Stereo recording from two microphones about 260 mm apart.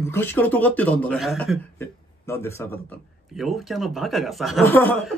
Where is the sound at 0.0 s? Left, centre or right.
Centre.